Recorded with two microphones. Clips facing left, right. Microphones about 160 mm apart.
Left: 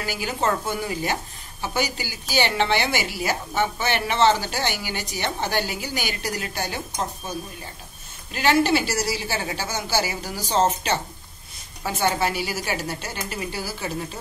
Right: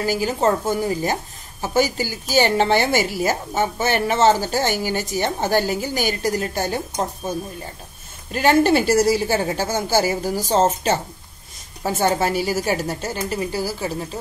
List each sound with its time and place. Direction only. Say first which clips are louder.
0.0 s a woman's voice: right 6 dB; 40° right (ahead or behind)